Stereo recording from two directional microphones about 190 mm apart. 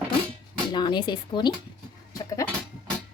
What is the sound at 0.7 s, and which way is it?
Speech, 25° left (ahead or behind).